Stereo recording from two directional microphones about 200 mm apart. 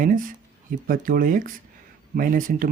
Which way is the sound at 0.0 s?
45° right (ahead or behind).